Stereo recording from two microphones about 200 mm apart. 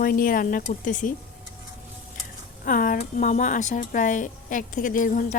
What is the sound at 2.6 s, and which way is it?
Speech, 45° left (ahead or behind).